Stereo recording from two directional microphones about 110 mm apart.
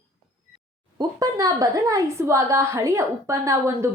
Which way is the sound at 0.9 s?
35° right (ahead or behind).